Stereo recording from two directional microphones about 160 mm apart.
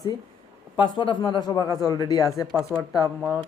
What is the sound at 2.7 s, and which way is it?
Speech, 5° left (ahead or behind).